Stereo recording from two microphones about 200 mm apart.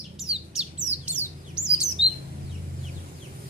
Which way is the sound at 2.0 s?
65° right (ahead or behind).